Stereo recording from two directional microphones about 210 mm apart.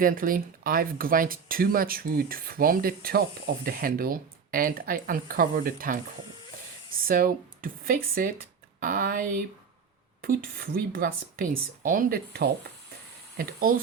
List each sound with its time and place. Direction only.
0.0 s speech: 40° right (ahead or behind)
7.0 s speech: 40° right (ahead or behind)